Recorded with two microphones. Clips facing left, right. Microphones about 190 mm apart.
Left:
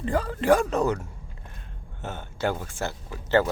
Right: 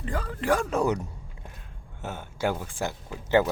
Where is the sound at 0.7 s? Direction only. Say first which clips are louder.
Left 1 dB; 15° right (ahead or behind).